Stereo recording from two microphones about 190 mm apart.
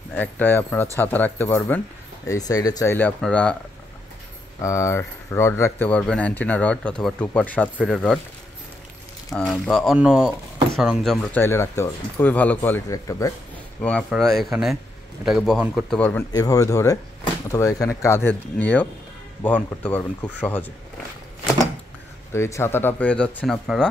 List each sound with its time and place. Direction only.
0.1 s speech: 10° left (ahead or behind)
4.6 s speech: 15° left (ahead or behind)
9.3 s speech: centre (ahead or behind)
11.3 s speech: 15° left (ahead or behind)
16.3 s speech: 20° left (ahead or behind)
22.3 s speech: 15° left (ahead or behind)